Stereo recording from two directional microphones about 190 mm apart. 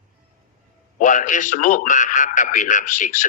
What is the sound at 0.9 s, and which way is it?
A man's voice, 45° left (ahead or behind).